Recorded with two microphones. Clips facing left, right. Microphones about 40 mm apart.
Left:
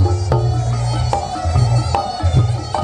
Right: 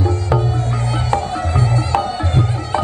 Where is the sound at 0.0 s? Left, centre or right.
Right.